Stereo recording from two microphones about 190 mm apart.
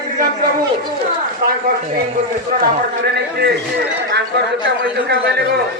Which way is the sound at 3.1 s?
55° right (ahead or behind).